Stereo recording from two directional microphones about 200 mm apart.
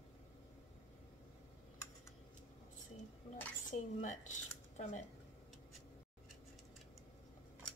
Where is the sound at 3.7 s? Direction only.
40° left (ahead or behind).